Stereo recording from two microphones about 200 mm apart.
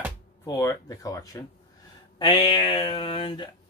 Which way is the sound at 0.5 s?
15° left (ahead or behind).